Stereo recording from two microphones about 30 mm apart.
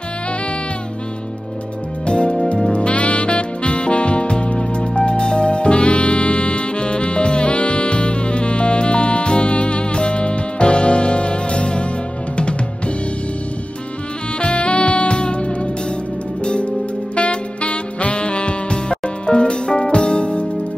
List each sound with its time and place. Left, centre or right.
2.0 s music: left
2.7 s music: left
14.4 s music: left